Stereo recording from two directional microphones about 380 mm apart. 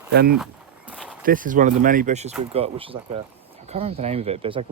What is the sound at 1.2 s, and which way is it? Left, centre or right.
Speech, right.